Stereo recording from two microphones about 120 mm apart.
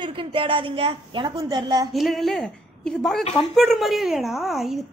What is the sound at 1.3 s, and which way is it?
Speech, 30° right (ahead or behind).